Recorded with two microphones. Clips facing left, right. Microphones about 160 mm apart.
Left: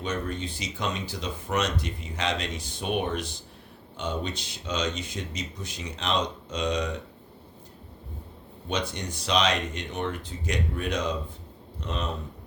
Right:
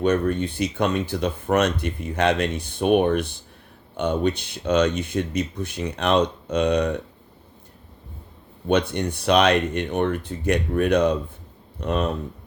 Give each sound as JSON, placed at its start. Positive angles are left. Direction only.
{"t": 0.0, "sound": "speech", "side_deg": -60}
{"t": 8.6, "sound": "speech", "side_deg": -60}